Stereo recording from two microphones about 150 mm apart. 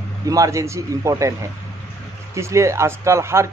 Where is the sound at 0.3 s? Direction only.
20° right (ahead or behind).